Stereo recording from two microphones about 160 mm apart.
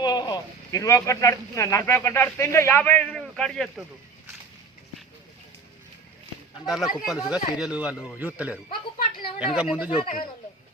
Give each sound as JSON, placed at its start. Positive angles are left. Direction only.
{"t": 0.0, "sound": "speech", "side_deg": 25}
{"t": 6.7, "sound": "speech", "side_deg": 0}
{"t": 9.2, "sound": "a woman's voice", "side_deg": 35}
{"t": 9.6, "sound": "speech", "side_deg": -5}